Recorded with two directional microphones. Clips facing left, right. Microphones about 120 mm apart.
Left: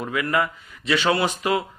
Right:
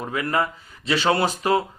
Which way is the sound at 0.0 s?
35° right (ahead or behind).